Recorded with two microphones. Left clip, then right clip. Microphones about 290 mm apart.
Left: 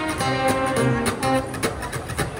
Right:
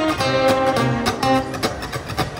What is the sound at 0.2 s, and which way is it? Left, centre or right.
Music, centre.